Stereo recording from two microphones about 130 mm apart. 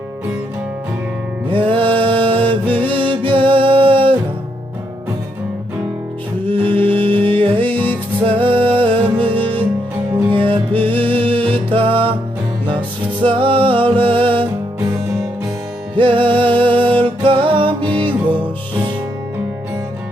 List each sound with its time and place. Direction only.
1.5 s music: 40° right (ahead or behind)
6.5 s music: 40° right (ahead or behind)
13.2 s music: 40° right (ahead or behind)
16.0 s music: 40° right (ahead or behind)